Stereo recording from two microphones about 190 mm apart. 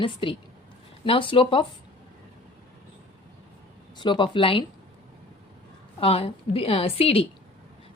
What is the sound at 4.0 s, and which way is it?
Speech, 25° left (ahead or behind).